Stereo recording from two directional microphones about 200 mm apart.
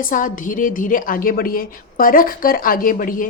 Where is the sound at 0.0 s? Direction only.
40° left (ahead or behind).